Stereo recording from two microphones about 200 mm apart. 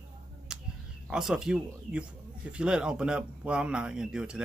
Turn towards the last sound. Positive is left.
turn(degrees=-5)  # may be behind; listen again after turning